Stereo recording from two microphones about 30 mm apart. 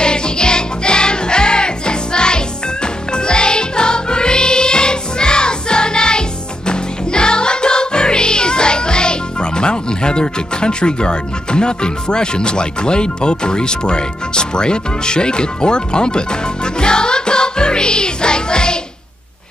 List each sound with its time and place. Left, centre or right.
0.0 s music: left